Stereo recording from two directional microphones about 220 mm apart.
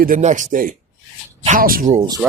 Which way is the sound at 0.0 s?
35° right (ahead or behind).